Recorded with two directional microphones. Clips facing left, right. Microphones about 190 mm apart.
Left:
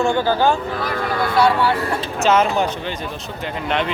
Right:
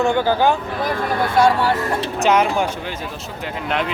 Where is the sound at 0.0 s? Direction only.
15° right (ahead or behind).